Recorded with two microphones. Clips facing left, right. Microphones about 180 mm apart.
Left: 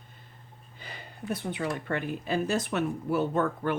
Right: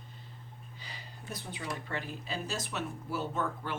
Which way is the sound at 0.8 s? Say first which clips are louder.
Left 9 dB; 55° left (ahead or behind).